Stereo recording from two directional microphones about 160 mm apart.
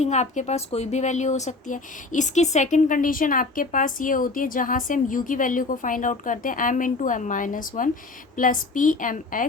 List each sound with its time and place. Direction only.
0.0 s speech: 45° left (ahead or behind)